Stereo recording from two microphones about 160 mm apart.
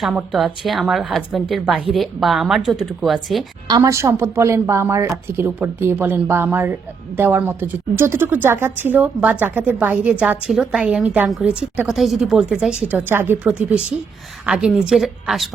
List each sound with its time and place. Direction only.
0.0 s a woman's voice: centre (ahead or behind)
3.7 s a woman's voice: 20° right (ahead or behind); by 15.4 s centre (ahead or behind)